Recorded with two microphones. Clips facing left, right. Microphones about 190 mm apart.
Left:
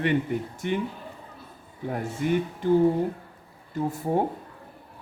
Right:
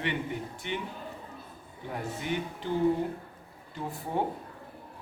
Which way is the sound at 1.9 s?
50° left (ahead or behind).